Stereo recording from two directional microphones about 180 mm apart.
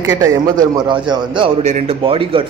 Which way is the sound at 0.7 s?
25° right (ahead or behind).